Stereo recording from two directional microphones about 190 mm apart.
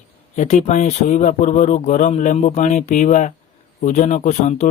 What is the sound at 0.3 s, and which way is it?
Speech, 40° left (ahead or behind).